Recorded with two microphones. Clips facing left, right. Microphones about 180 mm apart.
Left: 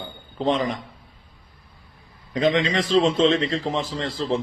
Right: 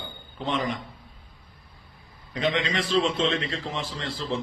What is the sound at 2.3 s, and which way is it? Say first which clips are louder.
A man's voice: left 6 dB; 35° left (ahead or behind).